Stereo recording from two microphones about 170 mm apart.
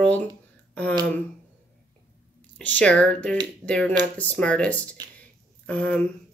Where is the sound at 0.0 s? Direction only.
10° left (ahead or behind).